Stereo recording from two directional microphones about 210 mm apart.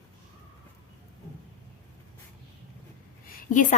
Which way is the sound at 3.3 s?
40° left (ahead or behind).